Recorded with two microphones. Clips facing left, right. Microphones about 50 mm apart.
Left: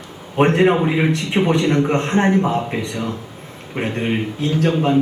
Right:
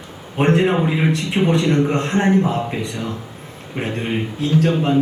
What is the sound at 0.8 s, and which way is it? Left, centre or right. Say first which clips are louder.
A man's voice: left 1 dB; left.